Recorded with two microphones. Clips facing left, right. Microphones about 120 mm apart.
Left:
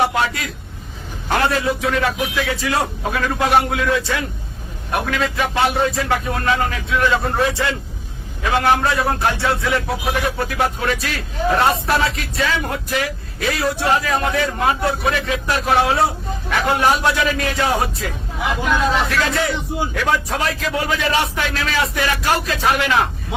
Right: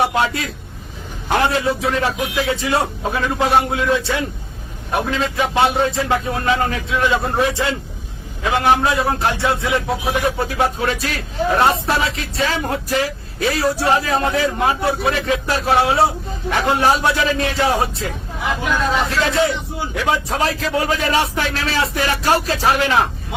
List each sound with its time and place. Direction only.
0.1 s speech: 25° right (ahead or behind)
7.0 s speech: 20° right (ahead or behind)
18.6 s speech: centre (ahead or behind)
19.1 s speech: 25° right (ahead or behind)